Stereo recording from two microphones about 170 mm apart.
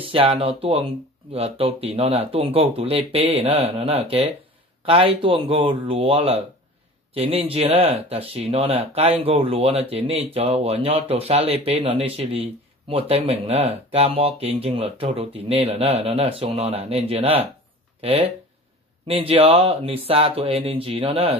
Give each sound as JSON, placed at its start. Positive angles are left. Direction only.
{"t": 0.0, "sound": "speech", "side_deg": -35}
{"t": 19.0, "sound": "speech", "side_deg": -35}